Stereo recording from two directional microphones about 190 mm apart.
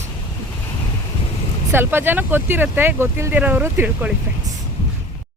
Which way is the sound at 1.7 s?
10° right (ahead or behind).